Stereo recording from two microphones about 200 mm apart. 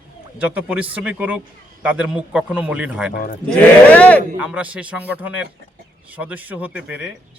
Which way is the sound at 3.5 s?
5° left (ahead or behind).